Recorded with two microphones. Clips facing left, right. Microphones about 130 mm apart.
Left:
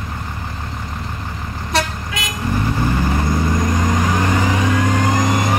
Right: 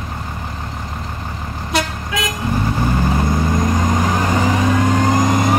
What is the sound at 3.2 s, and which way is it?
Vehicle, 20° right (ahead or behind).